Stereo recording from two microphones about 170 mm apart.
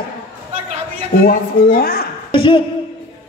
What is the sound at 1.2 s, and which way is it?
Speech, 60° left (ahead or behind).